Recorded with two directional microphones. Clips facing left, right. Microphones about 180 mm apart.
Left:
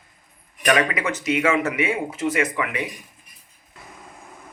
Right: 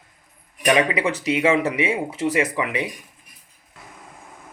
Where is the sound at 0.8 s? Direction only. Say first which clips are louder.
Right 3 dB; 30° right (ahead or behind).